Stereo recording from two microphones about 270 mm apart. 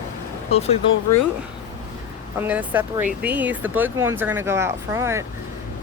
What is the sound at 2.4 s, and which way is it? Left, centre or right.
Speech, centre.